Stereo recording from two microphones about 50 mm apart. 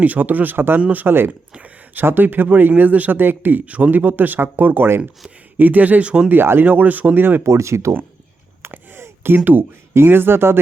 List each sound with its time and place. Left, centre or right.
0.0 s speech: right
0.8 s speech: right
1.0 s speech: right
1.3 s speech: right
2.0 s speech: right
6.2 s speech: right
6.7 s speech: right
7.4 s speech: right
8.7 s a sound: right
9.4 s speech: right
9.9 s speech: right